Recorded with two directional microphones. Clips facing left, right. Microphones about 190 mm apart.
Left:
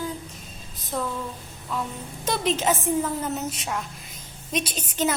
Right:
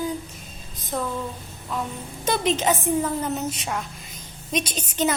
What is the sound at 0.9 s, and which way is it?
Speech, centre (ahead or behind).